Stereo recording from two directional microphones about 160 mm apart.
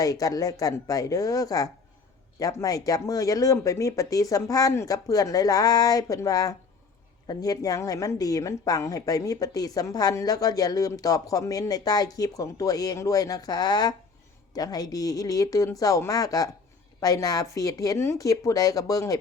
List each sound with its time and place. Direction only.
0.0 s a woman's voice: 20° left (ahead or behind)